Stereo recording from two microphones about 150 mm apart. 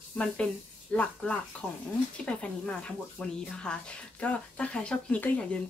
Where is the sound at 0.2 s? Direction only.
5° left (ahead or behind).